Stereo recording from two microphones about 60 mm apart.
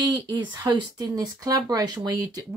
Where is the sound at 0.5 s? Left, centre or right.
Right.